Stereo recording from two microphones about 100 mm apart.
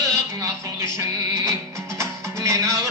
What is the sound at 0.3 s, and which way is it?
Music, 30° right (ahead or behind).